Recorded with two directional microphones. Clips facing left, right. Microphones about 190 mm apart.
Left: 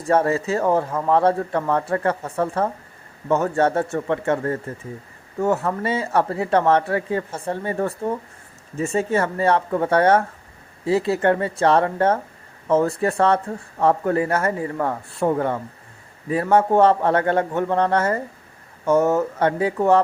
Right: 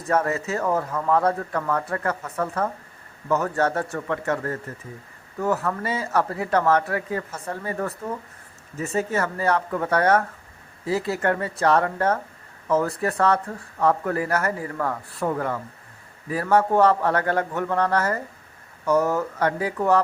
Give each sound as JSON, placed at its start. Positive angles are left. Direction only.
{"t": 0.0, "sound": "speech", "side_deg": 30}